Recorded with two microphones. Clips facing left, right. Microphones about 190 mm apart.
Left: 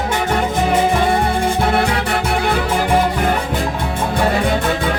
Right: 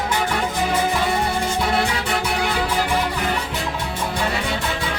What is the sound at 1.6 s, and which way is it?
Music, 55° left (ahead or behind).